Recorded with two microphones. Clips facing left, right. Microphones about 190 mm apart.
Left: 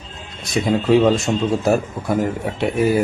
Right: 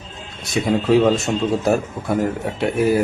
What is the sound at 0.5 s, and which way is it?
Speech, 5° left (ahead or behind).